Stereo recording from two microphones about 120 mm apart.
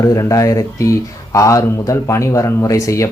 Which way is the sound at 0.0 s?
30° left (ahead or behind).